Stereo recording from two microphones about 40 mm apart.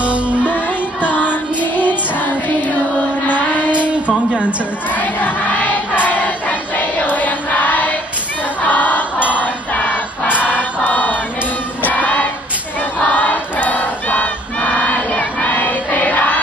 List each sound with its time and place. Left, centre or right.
0.0 s music: right
1.0 s music: left
3.3 s child singing: left
4.3 s a woman's voice: right
4.9 s choir: left
9.3 s a sound: left
10.3 s choir: left
15.5 s music: left